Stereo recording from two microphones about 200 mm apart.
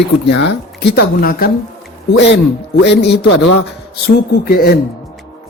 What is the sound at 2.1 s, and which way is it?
Speech, 60° left (ahead or behind).